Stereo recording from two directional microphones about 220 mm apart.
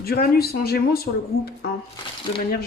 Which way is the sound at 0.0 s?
45° left (ahead or behind).